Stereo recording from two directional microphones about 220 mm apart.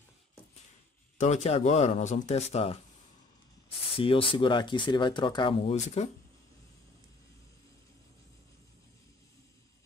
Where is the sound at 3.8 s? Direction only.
25° left (ahead or behind).